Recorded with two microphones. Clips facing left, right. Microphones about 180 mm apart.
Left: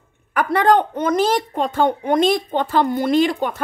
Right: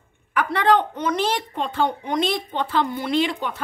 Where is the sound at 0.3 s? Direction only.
45° left (ahead or behind).